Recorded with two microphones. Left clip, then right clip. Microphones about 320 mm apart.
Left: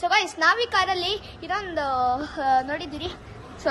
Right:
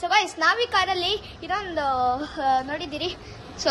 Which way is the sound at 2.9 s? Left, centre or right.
Centre.